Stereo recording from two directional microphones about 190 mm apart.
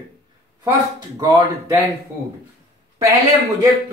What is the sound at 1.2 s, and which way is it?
Speech, 20° right (ahead or behind).